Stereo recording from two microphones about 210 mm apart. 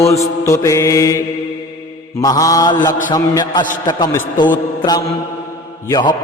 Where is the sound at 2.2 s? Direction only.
15° left (ahead or behind).